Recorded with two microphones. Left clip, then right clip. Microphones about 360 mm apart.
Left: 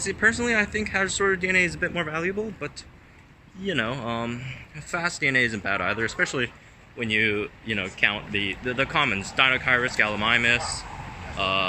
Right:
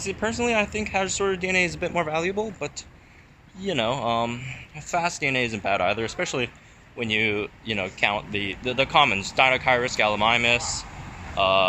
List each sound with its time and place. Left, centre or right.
0.0 s speech: centre